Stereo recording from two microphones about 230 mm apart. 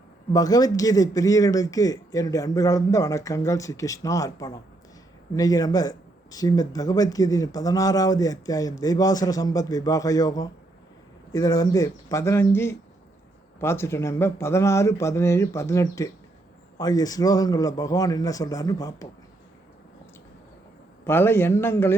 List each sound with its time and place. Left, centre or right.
0.3 s a man's voice: centre
21.0 s a man's voice: centre